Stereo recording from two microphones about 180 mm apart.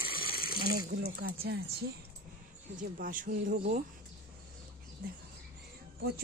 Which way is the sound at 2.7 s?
50° right (ahead or behind).